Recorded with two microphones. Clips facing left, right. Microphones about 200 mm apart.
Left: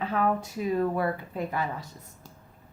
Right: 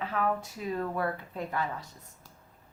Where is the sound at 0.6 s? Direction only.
15° left (ahead or behind).